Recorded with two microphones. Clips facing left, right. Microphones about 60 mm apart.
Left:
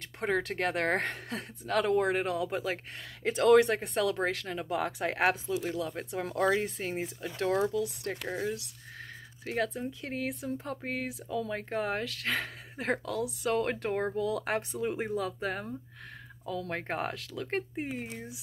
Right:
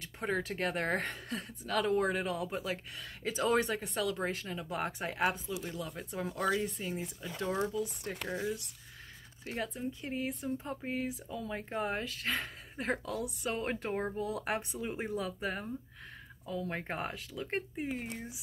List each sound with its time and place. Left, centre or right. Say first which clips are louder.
0.2 s speech: left 4 dB; left
4.6 s speech: left 5 dB; left
7.7 s speech: left 4 dB; left
8.2 s speech: left 1 dB; centre
9.4 s speech: left 5 dB; left
14.1 s speech: left 5 dB; left
14.8 s speech: left 5 dB; left
16.4 s speech: left 3 dB; left